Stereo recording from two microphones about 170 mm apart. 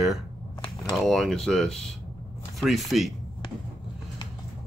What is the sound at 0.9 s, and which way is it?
Speech, centre (ahead or behind).